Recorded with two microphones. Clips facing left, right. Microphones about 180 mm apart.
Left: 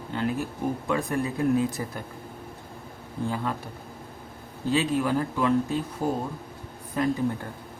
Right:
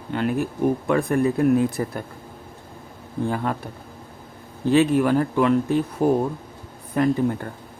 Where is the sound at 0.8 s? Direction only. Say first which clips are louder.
Right 5 dB; 55° right (ahead or behind).